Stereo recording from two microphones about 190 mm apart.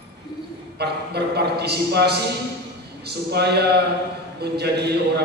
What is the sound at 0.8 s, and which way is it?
A man's voice, 60° right (ahead or behind).